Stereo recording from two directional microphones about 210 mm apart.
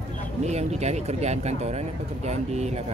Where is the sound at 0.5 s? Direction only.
30° right (ahead or behind).